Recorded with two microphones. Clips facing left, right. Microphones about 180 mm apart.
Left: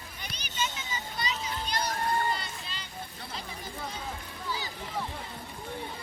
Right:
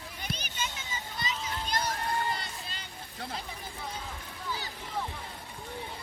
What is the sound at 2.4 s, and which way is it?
Music, 50° right (ahead or behind).